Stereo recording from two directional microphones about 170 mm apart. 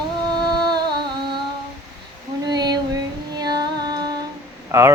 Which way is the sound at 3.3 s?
25° right (ahead or behind).